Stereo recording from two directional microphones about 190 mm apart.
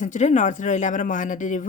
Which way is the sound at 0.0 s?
40° left (ahead or behind).